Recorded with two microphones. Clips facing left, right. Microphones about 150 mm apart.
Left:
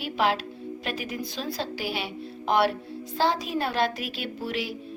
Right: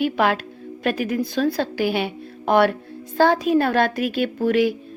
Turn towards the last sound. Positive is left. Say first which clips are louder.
# right 13 dB
turn(degrees=-55)  # may be behind; listen again after turning